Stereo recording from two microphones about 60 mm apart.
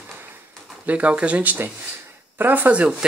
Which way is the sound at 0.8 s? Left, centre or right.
Right.